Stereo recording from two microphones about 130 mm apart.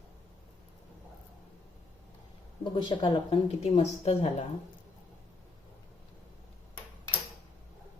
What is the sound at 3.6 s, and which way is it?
Speech, 55° left (ahead or behind).